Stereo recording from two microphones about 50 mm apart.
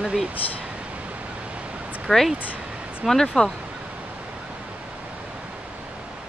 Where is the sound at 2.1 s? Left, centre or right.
Centre.